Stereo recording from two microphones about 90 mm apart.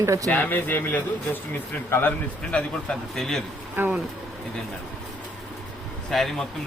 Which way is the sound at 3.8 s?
25° right (ahead or behind).